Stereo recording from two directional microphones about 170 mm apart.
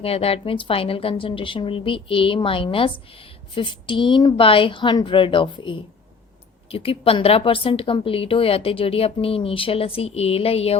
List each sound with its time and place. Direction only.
0.0 s a woman's voice: 35° left (ahead or behind)